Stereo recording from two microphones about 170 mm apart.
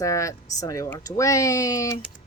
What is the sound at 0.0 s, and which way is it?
Speech, 20° left (ahead or behind).